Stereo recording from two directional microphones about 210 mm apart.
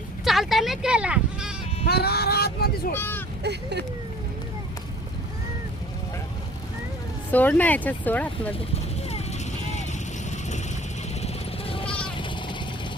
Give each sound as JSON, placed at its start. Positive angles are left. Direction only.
{"t": 0.3, "sound": "speech", "side_deg": 0}
{"t": 1.9, "sound": "speech", "side_deg": 50}
{"t": 2.9, "sound": "speech", "side_deg": 10}
{"t": 3.4, "sound": "speech", "side_deg": -55}
{"t": 7.3, "sound": "speech", "side_deg": 10}
{"t": 11.2, "sound": "sheep", "side_deg": 25}